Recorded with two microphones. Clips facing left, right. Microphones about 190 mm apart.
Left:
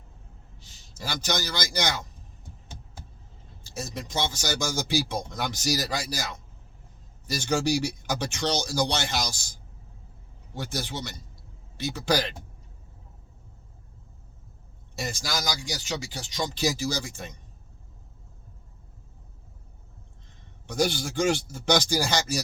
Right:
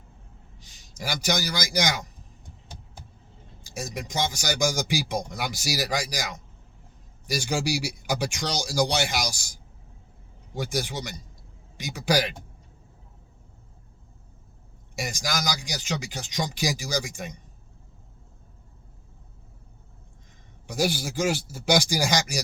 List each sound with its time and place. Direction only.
0.6 s a man's voice: 15° right (ahead or behind)
3.6 s a man's voice: 15° right (ahead or behind)
14.9 s a man's voice: 10° right (ahead or behind)
20.7 s a man's voice: 5° right (ahead or behind)